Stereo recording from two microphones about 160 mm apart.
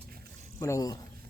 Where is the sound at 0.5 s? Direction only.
15° left (ahead or behind).